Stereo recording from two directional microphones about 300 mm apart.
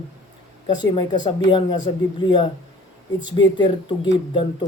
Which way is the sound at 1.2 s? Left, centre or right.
Centre.